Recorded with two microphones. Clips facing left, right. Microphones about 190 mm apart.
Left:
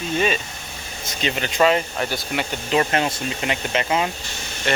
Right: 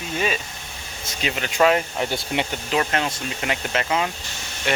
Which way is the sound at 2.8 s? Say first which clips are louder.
Left 3 dB; 10° left (ahead or behind).